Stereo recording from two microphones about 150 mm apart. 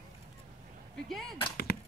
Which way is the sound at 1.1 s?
Centre (ahead or behind).